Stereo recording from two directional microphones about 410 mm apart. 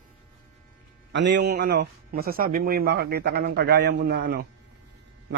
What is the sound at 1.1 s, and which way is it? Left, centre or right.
Speech, right.